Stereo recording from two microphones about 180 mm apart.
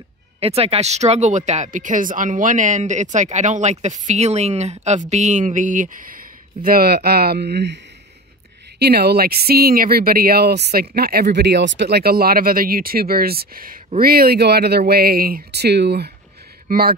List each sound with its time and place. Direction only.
0.4 s speech: 35° right (ahead or behind); by 16.9 s 55° right (ahead or behind)